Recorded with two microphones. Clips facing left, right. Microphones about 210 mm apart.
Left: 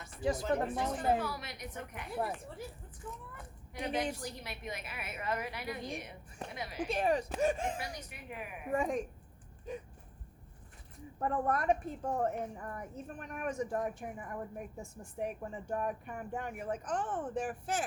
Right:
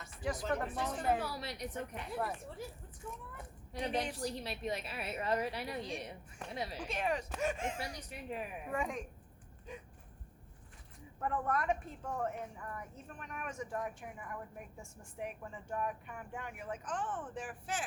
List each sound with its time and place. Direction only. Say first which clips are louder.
0.2 s speech: left 4 dB; 25° left (ahead or behind)
1.2 s a woman's voice: even; 35° right (ahead or behind)
3.3 s a woman's voice: right 1 dB; 30° right (ahead or behind)
6.8 s a woman's voice: left 7 dB; 35° left (ahead or behind)
8.1 s a woman's voice: right 3 dB; 30° right (ahead or behind)
8.7 s a woman's voice: left 6 dB; 35° left (ahead or behind)
11.2 s a woman's voice: left 3 dB; 35° left (ahead or behind)